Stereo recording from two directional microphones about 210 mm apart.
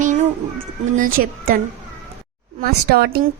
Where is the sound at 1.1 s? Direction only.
45° right (ahead or behind).